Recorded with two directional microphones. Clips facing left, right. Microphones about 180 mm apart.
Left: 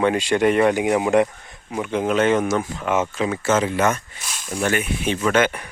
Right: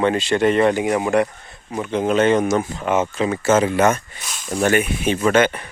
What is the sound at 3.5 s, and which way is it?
Speech, 45° right (ahead or behind).